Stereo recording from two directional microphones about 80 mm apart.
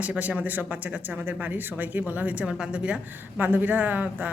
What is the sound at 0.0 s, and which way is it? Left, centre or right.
Speech, centre.